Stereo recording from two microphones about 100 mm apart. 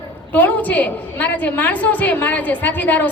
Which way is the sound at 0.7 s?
15° left (ahead or behind).